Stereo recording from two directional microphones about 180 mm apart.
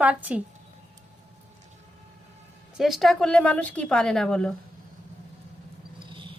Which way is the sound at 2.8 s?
Centre (ahead or behind).